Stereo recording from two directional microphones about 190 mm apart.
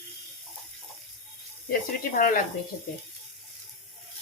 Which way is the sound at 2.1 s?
50° left (ahead or behind).